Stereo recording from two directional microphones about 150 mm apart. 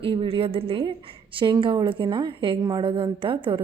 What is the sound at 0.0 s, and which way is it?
A woman's voice, 35° right (ahead or behind).